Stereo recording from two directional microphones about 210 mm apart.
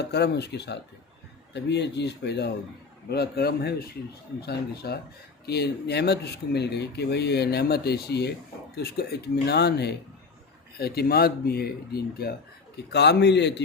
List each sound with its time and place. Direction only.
0.1 s a man's voice: 50° left (ahead or behind)